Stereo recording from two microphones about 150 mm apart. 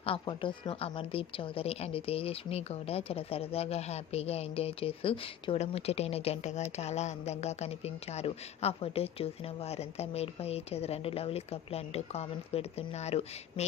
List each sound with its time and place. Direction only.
0.0 s speech: 35° left (ahead or behind)